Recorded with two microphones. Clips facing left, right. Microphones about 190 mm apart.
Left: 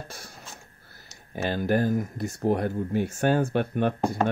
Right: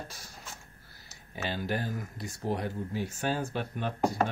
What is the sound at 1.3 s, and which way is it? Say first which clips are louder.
Speech: left 8 dB; 50° left (ahead or behind).